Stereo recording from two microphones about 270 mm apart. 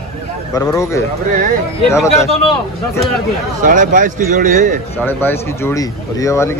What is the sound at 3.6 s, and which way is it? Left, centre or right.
A man's voice, right.